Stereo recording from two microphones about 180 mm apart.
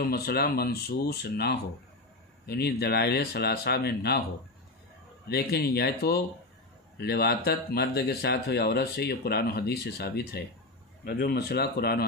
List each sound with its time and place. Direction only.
0.0 s speech: 60° left (ahead or behind)
5.3 s speech: 60° left (ahead or behind)